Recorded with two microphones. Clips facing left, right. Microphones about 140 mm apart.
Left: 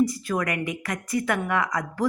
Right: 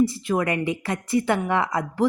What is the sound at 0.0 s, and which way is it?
Speech, 25° right (ahead or behind).